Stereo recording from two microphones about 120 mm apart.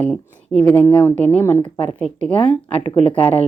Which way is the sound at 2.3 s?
50° left (ahead or behind).